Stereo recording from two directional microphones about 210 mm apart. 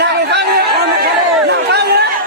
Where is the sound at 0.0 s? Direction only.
50° right (ahead or behind).